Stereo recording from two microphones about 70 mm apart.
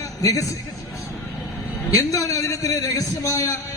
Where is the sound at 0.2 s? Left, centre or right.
Left.